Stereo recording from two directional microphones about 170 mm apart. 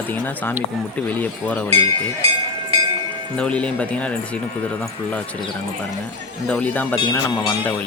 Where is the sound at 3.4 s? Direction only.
5° left (ahead or behind).